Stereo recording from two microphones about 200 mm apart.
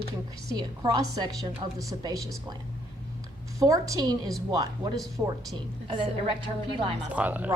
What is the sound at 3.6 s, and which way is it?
A woman's voice, 15° right (ahead or behind).